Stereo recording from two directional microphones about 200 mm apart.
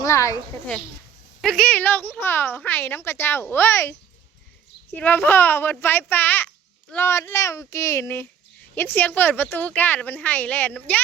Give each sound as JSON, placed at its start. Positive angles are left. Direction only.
{"t": 0.0, "sound": "speech", "side_deg": 15}
{"t": 1.4, "sound": "speech", "side_deg": 5}
{"t": 4.9, "sound": "speech", "side_deg": 10}